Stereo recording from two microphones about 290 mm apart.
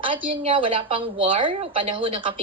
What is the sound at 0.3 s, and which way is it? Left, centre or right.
Speech, centre.